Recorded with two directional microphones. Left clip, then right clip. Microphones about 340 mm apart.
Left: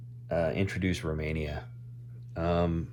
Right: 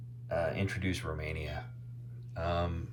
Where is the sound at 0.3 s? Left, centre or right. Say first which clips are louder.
Left 4 dB; left.